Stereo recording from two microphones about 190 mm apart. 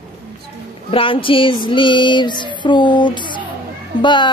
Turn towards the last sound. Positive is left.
turn(degrees=25)  # may be behind; listen again after turning